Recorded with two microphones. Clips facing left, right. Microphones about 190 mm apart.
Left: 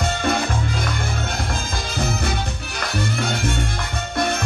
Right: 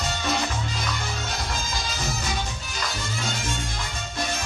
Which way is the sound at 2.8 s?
60° left (ahead or behind).